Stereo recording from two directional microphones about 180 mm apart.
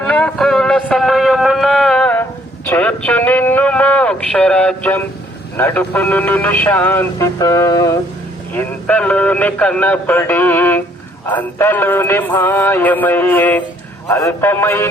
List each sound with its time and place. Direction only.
0.1 s a sound: 5° left (ahead or behind)
2.6 s vehicle: 10° left (ahead or behind)
5.5 s a man's voice: 10° left (ahead or behind)